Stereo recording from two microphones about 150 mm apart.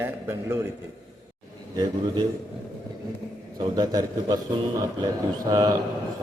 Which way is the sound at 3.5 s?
25° right (ahead or behind).